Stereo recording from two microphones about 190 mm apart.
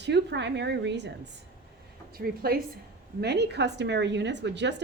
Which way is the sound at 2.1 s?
50° right (ahead or behind).